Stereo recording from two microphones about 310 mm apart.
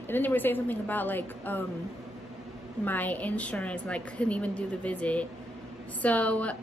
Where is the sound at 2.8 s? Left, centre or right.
Centre.